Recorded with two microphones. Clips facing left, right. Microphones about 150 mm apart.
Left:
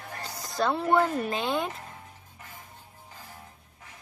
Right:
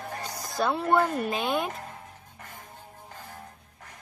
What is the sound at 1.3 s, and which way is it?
Speech, 10° right (ahead or behind).